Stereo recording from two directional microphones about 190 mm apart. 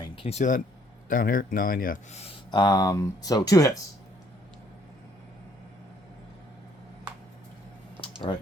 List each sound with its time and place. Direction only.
0.0 s a man's voice: 30° left (ahead or behind); by 2.2 s 45° left (ahead or behind)
2.2 s speech: 25° left (ahead or behind)
8.3 s speech: 25° left (ahead or behind)